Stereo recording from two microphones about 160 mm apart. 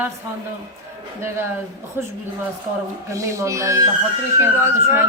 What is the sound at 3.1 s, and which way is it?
Speech, 20° right (ahead or behind).